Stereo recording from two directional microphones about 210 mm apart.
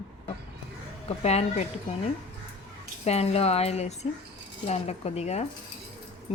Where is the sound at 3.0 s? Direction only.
30° left (ahead or behind).